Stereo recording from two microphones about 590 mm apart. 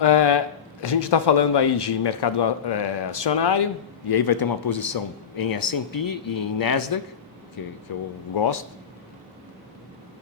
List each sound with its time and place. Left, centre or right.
0.0 s a man's voice: left